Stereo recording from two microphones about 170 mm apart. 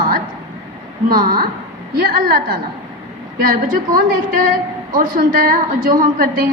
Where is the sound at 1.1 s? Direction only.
55° right (ahead or behind).